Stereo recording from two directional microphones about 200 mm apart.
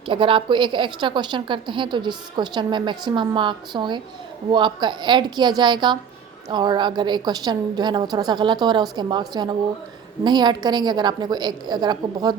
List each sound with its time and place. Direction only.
0.1 s a woman's voice: 25° right (ahead or behind)